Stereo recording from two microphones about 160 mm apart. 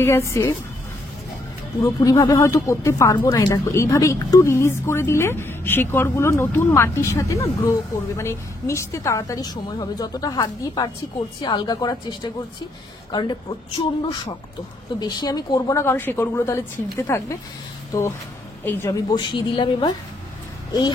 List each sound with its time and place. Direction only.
0.0 s speech: 15° left (ahead or behind)
1.8 s a woman's voice: 20° left (ahead or behind)
18.6 s speech: 15° left (ahead or behind)
19.0 s a woman's voice: 25° left (ahead or behind)